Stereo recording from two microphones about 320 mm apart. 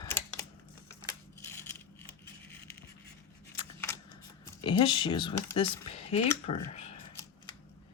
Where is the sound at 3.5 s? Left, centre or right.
Centre.